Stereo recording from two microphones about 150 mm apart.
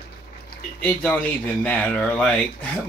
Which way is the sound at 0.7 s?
10° left (ahead or behind).